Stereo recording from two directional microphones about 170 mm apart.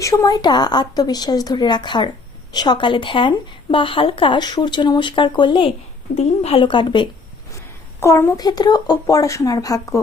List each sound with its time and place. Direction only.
0.0 s a woman's voice: 20° left (ahead or behind)
8.0 s a woman's voice: 15° left (ahead or behind)